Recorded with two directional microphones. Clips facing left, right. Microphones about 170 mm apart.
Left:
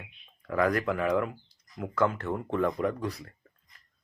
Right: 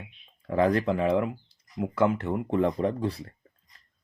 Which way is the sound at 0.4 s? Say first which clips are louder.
Right 3 dB; 30° right (ahead or behind).